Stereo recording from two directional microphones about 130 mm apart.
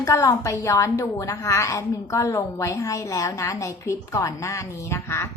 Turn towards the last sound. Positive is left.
turn(degrees=20)  # may be behind; listen again after turning